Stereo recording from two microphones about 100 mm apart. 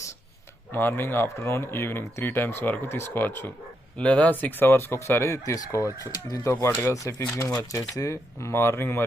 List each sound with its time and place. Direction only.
0.7 s speech: 20° left (ahead or behind); by 6.3 s 40° left (ahead or behind)
6.5 s speech: 25° left (ahead or behind)